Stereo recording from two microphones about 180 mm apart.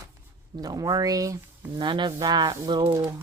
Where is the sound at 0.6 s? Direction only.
20° right (ahead or behind).